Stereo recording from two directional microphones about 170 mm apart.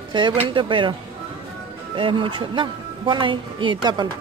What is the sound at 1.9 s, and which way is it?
Speech, 30° right (ahead or behind).